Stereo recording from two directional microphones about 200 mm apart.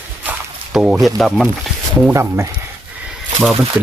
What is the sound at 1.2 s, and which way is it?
Speech, centre (ahead or behind).